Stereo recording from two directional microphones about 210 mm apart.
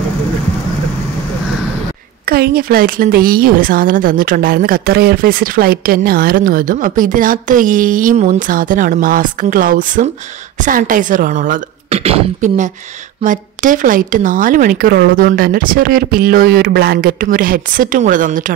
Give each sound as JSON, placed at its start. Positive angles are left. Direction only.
{"t": 2.2, "sound": "a woman's voice", "side_deg": -45}